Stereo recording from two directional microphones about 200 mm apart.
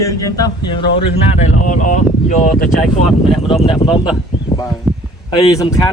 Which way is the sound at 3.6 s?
25° left (ahead or behind).